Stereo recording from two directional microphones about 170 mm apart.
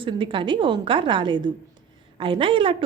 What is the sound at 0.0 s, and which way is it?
A woman's voice, 30° right (ahead or behind).